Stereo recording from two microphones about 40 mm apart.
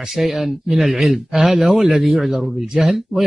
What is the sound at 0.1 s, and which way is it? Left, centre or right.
Speech, centre.